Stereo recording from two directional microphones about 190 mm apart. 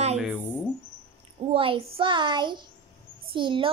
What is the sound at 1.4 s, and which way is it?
A child's voice, 30° right (ahead or behind).